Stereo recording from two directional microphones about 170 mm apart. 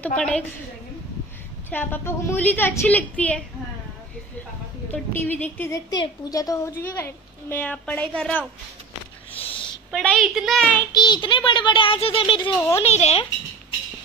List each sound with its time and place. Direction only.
0.2 s a woman's voice: 5° left (ahead or behind)
1.7 s a woman's voice: 10° left (ahead or behind)
4.9 s a woman's voice: 10° left (ahead or behind)
5.9 s a woman's voice: 20° left (ahead or behind)
9.4 s a sound: 30° left (ahead or behind)
9.8 s a woman's voice: centre (ahead or behind)
10.9 s speech: 25° left (ahead or behind)